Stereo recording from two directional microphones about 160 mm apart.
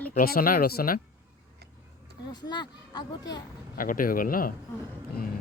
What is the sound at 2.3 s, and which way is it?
Speech, 25° left (ahead or behind).